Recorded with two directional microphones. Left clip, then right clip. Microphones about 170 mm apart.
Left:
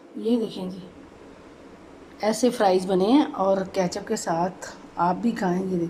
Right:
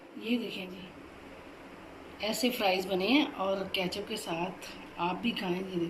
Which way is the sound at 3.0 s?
55° left (ahead or behind).